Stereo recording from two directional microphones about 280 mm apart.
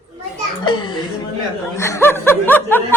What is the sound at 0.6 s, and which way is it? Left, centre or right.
A child's voice, centre.